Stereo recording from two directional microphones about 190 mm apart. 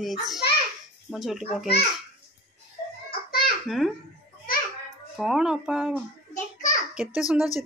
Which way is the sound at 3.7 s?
Centre (ahead or behind).